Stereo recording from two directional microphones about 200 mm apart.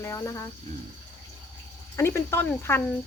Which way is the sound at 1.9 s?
15° left (ahead or behind).